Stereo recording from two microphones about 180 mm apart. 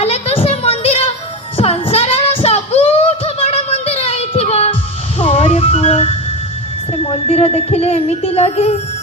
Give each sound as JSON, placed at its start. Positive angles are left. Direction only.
{"t": 0.0, "sound": "a sound", "side_deg": 35}
{"t": 1.5, "sound": "child singing", "side_deg": 35}
{"t": 5.2, "sound": "music", "side_deg": 35}
{"t": 6.9, "sound": "speech", "side_deg": 30}